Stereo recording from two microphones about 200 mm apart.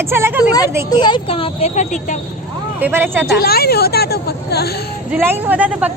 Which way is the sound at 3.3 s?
50° left (ahead or behind).